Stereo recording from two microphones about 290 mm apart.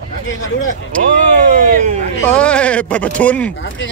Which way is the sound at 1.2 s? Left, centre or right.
Right.